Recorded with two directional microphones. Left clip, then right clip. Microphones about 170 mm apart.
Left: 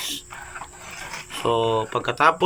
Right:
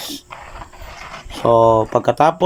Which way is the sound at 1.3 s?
35° right (ahead or behind).